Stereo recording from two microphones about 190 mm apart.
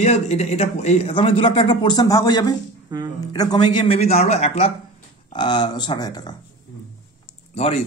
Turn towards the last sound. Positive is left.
turn(degrees=35)  # may be behind; listen again after turning